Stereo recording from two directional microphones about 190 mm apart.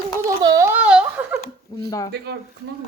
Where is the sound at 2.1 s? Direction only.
60° right (ahead or behind).